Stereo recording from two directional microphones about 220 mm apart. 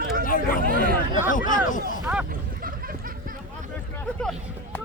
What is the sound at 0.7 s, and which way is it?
Chatter, 40° right (ahead or behind).